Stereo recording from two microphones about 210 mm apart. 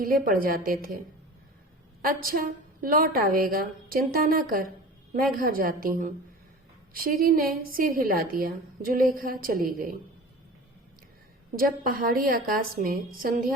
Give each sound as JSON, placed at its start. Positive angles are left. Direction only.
{"t": 0.0, "sound": "a woman's voice", "side_deg": -45}
{"t": 2.0, "sound": "a woman's voice", "side_deg": -45}
{"t": 11.5, "sound": "a woman's voice", "side_deg": -40}